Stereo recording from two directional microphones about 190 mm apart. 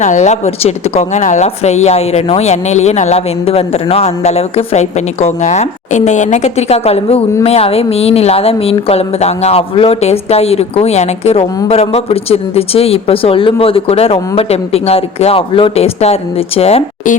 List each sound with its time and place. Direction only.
0.0 s speech: 40° left (ahead or behind)